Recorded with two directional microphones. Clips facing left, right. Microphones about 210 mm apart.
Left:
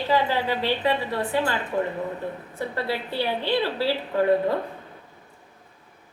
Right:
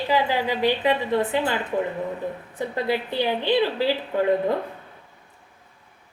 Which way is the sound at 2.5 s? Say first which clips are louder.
Right 4 dB; 20° right (ahead or behind).